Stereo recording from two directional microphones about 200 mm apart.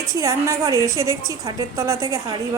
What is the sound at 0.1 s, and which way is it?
A woman's voice, 15° right (ahead or behind).